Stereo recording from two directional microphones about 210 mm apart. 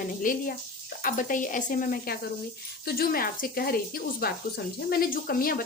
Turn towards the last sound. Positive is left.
turn(degrees=45)  # may be behind; listen again after turning